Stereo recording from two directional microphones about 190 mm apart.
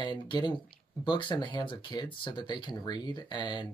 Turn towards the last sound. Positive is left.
turn(degrees=25)  # may be behind; listen again after turning